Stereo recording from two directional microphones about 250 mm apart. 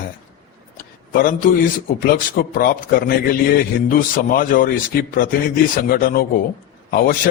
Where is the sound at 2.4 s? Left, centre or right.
Left.